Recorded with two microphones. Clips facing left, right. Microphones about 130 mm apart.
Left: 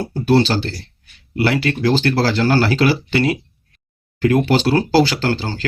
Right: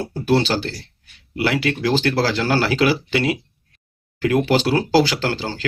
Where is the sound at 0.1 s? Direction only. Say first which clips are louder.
Left 3 dB; 5° right (ahead or behind).